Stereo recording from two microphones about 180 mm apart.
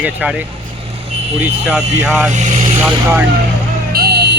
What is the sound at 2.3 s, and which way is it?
Vehicle, 40° right (ahead or behind).